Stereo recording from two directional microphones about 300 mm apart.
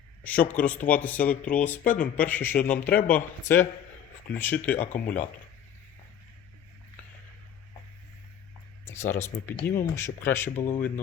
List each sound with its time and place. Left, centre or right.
0.2 s speech: centre
4.9 s speech: left
8.8 s a sound: centre
9.5 s speech: centre